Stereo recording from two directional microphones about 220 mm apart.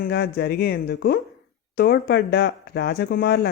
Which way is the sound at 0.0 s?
45° left (ahead or behind).